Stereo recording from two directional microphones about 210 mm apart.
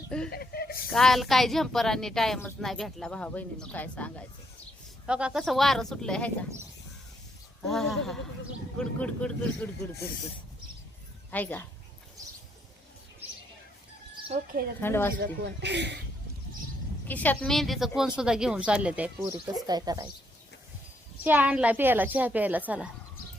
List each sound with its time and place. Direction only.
0.3 s a sound: 50° left (ahead or behind)
0.9 s a woman's voice: centre (ahead or behind)
5.0 s a woman's voice: 5° right (ahead or behind)
7.7 s a woman's voice: centre (ahead or behind)
11.3 s speech: 10° left (ahead or behind)
14.2 s a sound: 25° right (ahead or behind)
14.8 s speech: 10° left (ahead or behind)
15.2 s speech: 55° right (ahead or behind)
17.1 s a woman's voice: 5° left (ahead or behind); by 20.1 s 20° right (ahead or behind)
21.2 s a woman's voice: 5° right (ahead or behind)